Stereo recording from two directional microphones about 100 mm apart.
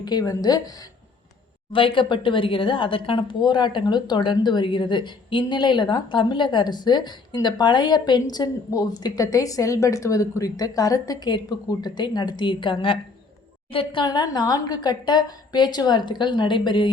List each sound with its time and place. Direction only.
0.0 s speech: 40° left (ahead or behind)
1.7 s a woman's voice: 60° left (ahead or behind)
14.0 s a woman's voice: 45° left (ahead or behind)